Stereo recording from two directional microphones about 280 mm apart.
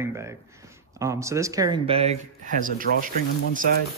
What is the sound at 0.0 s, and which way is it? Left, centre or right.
Speech, centre.